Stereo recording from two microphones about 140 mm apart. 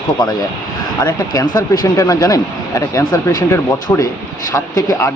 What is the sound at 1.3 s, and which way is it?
Speech, 25° left (ahead or behind).